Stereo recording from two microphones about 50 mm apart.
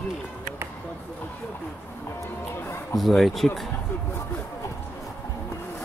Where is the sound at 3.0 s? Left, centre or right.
Centre.